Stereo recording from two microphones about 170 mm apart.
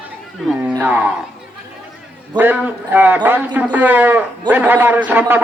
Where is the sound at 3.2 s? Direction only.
10° right (ahead or behind).